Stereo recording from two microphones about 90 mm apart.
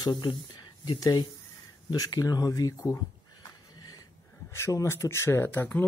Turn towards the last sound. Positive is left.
turn(degrees=20)  # may be behind; listen again after turning